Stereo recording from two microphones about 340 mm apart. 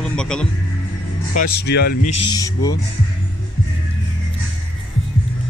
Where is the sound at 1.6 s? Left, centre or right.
Left.